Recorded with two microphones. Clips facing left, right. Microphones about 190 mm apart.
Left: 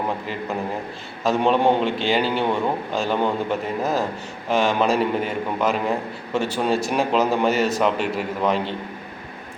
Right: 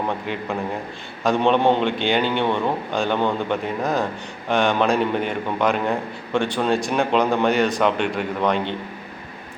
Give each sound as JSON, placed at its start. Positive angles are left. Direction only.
{"t": 1.2, "sound": "a man's voice", "side_deg": 5}